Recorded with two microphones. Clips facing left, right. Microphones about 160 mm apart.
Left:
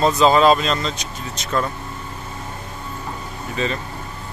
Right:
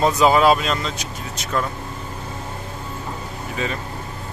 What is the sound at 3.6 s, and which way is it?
Speech, 10° right (ahead or behind).